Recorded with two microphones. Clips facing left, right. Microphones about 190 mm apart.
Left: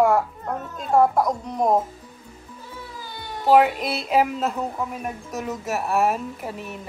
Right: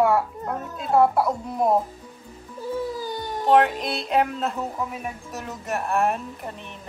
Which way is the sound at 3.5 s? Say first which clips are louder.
Left 2 dB; 5° left (ahead or behind).